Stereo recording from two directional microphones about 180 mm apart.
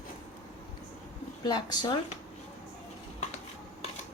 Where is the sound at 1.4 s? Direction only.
25° left (ahead or behind).